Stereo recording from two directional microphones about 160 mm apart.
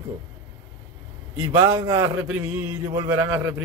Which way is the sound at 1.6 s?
20° right (ahead or behind).